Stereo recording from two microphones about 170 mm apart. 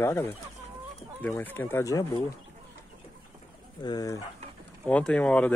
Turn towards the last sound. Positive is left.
turn(degrees=10)  # may be behind; listen again after turning